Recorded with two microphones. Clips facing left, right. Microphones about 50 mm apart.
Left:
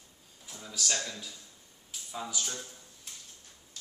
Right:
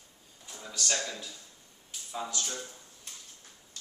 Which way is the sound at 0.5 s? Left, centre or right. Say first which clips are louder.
Right 1 dB; centre.